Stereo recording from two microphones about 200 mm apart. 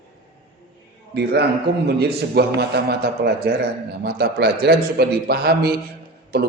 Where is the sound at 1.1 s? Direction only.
55° right (ahead or behind).